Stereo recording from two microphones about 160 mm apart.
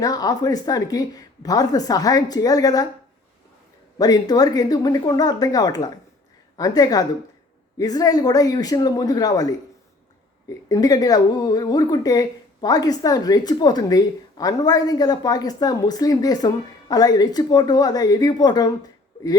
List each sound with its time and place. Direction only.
0.0 s speech: 25° left (ahead or behind)
3.9 s speech: 25° left (ahead or behind)
10.7 s speech: 25° left (ahead or behind)